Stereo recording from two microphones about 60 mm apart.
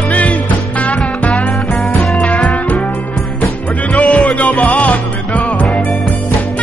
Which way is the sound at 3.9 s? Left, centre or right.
Left.